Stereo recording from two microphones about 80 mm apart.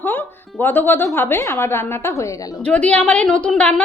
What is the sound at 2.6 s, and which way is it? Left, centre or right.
A woman's voice, centre.